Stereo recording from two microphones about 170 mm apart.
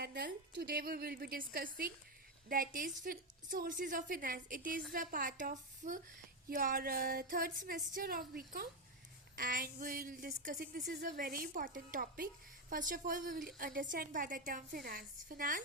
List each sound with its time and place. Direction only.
0.0 s a woman's voice: 70° right (ahead or behind); by 6.0 s 50° right (ahead or behind)
6.5 s a sound: 55° right (ahead or behind)
12.7 s a woman's voice: 50° right (ahead or behind)